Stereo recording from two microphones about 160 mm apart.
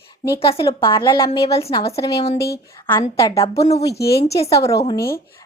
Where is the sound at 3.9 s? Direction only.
90° left.